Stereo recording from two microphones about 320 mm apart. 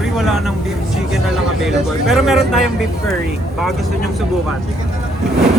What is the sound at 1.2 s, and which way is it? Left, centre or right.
Speech, centre.